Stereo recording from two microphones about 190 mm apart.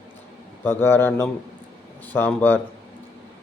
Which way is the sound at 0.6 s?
10° left (ahead or behind).